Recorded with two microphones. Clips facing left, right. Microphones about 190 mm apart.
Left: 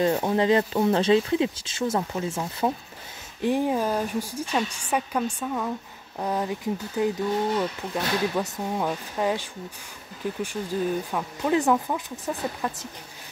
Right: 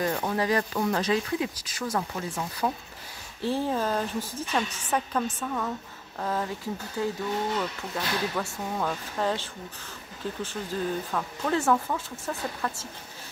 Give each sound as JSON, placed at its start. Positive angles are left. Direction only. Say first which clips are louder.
{"t": 0.0, "sound": "speech", "louder": "left 5 dB", "side_deg": 25}